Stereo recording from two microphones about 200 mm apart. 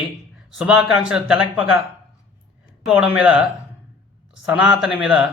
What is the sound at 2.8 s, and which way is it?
Speech, 5° right (ahead or behind).